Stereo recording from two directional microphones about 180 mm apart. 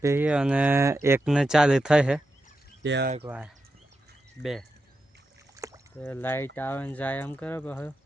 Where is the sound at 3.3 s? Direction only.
5° right (ahead or behind).